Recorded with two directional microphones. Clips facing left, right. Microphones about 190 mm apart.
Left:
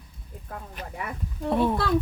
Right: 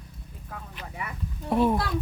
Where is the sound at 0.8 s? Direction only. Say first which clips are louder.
Left 3 dB; 50° left (ahead or behind).